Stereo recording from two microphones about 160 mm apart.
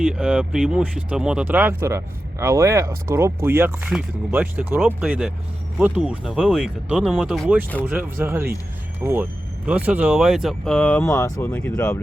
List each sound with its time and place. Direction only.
0.1 s speech: 5° right (ahead or behind)
11.1 s speech: 20° left (ahead or behind)
11.5 s speech: 5° left (ahead or behind)